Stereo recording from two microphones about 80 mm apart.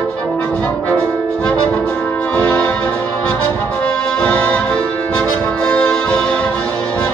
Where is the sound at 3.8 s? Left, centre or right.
Centre.